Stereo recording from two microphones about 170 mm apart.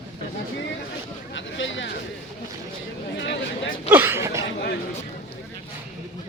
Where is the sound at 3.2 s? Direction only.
90° left.